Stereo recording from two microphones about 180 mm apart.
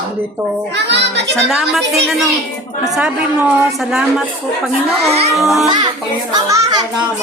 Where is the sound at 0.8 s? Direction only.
70° right (ahead or behind).